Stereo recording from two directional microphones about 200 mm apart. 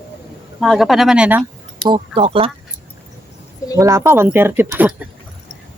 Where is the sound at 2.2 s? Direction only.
30° right (ahead or behind).